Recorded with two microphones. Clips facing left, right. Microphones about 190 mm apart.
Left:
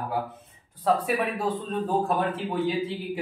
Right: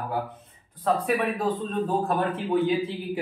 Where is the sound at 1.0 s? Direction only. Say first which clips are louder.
Right 2 dB; 10° left (ahead or behind).